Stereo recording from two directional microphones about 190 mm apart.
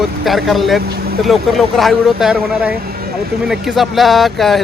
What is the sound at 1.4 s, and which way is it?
Speech, centre (ahead or behind).